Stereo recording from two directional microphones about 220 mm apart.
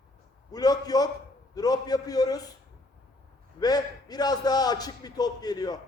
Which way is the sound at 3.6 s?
20° left (ahead or behind).